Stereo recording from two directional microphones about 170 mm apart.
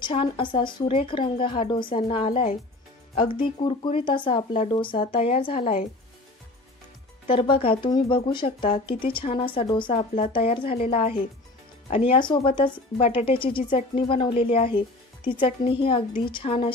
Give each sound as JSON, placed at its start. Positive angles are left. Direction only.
{"t": 0.0, "sound": "speech", "side_deg": 30}
{"t": 7.2, "sound": "speech", "side_deg": 30}